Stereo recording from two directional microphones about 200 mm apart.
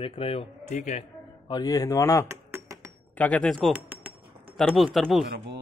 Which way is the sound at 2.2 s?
15° right (ahead or behind).